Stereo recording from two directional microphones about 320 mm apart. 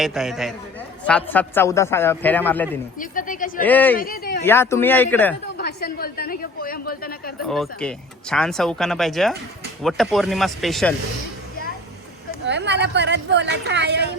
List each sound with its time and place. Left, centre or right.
0.0 s speech: centre
3.0 s a woman's voice: left
3.6 s speech: centre
3.9 s speech: left
4.4 s speech: centre
5.5 s a woman's voice: left
7.4 s speech: centre
12.5 s a woman's voice: right